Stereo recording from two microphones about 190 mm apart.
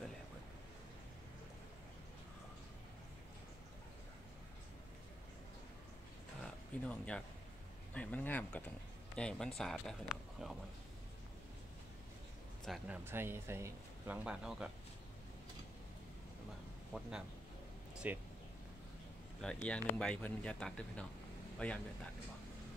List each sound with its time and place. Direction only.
6.4 s a sound: 5° left (ahead or behind)
7.9 s speech: 5° left (ahead or behind)
12.6 s speech: 5° right (ahead or behind)
18.0 s speech: 10° right (ahead or behind)
19.4 s speech: 5° left (ahead or behind)